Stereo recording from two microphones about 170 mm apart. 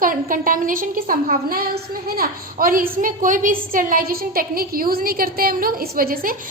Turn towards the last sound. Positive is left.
turn(degrees=-60)  # may be behind; listen again after turning